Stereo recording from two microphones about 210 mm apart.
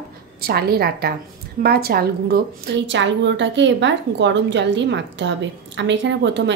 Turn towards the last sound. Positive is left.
turn(degrees=-55)  # may be behind; listen again after turning